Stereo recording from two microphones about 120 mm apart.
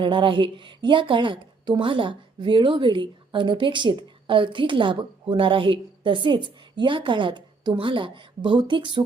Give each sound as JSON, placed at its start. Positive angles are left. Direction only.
{"t": 0.0, "sound": "a woman's voice", "side_deg": -45}